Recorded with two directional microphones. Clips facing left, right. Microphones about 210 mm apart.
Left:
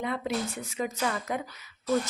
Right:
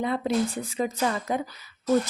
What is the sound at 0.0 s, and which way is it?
Speech, 30° right (ahead or behind).